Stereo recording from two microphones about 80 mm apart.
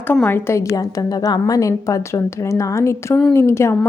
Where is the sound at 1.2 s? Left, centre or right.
Left.